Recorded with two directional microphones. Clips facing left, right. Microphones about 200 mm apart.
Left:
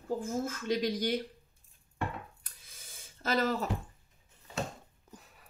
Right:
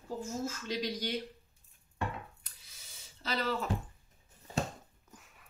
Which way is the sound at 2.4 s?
50° left (ahead or behind).